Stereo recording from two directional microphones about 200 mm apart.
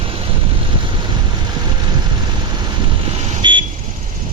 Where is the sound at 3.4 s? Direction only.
25° right (ahead or behind).